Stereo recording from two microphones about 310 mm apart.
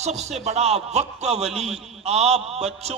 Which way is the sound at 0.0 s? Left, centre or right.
Right.